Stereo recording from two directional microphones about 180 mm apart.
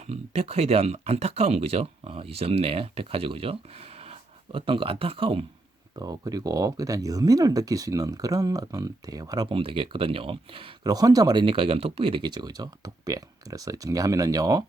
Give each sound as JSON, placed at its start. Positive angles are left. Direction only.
{"t": 0.1, "sound": "speech", "side_deg": -35}